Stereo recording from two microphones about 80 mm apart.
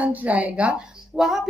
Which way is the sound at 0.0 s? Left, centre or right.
Centre.